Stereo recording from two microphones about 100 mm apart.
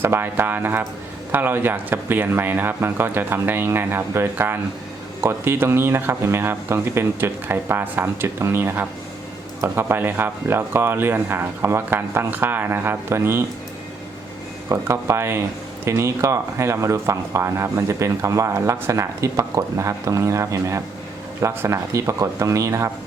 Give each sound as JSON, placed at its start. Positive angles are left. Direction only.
{"t": 0.0, "sound": "speech", "side_deg": -20}
{"t": 14.7, "sound": "speech", "side_deg": -25}